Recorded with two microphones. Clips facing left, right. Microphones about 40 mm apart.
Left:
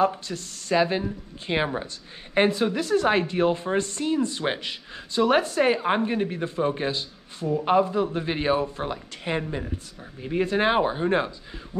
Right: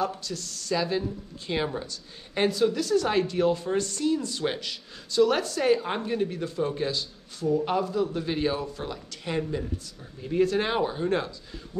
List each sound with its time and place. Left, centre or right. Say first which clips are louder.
0.0 s speech: left 6 dB; left